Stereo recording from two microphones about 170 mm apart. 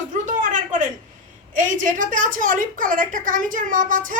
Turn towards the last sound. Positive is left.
turn(degrees=-50)  # may be behind; listen again after turning